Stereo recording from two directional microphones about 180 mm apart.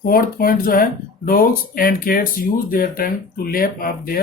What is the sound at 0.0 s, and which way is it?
Speech, 50° left (ahead or behind).